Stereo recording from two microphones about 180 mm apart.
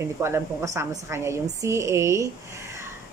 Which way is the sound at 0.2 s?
15° right (ahead or behind).